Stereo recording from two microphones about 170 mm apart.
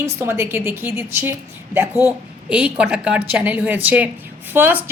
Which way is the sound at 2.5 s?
10° right (ahead or behind).